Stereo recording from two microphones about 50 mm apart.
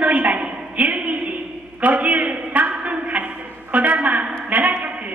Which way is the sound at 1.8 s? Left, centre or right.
Right.